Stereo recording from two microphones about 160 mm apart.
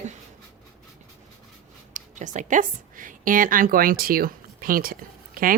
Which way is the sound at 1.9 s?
50° right (ahead or behind).